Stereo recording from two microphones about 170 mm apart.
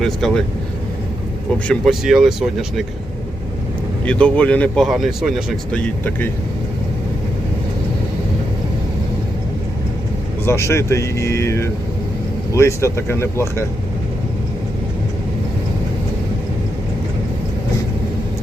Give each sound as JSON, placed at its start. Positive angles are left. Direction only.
{"t": 0.0, "sound": "speech", "side_deg": 0}
{"t": 1.6, "sound": "speech", "side_deg": 0}
{"t": 4.0, "sound": "speech", "side_deg": 5}
{"t": 5.7, "sound": "speech", "side_deg": 10}
{"t": 10.4, "sound": "speech", "side_deg": 15}